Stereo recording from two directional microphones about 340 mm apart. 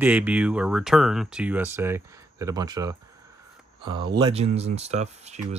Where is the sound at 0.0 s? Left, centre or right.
Centre.